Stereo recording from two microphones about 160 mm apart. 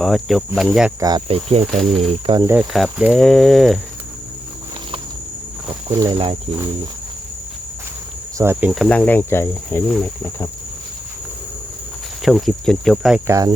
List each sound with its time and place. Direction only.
0.0 s speech: centre (ahead or behind)
0.9 s speech: 25° right (ahead or behind)
1.3 s speech: 40° right (ahead or behind)
1.8 s speech: centre (ahead or behind)
2.4 s cricket: 15° right (ahead or behind)
2.7 s speech: centre (ahead or behind)
5.9 s speech: 25° right (ahead or behind)
8.4 s cricket: 15° right (ahead or behind)
8.7 s speech: 5° left (ahead or behind)
12.2 s speech: centre (ahead or behind)
13.2 s speech: 20° right (ahead or behind)